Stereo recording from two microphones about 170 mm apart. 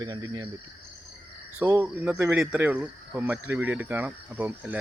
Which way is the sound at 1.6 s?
15° right (ahead or behind).